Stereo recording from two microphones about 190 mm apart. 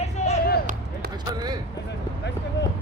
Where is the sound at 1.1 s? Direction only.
20° right (ahead or behind).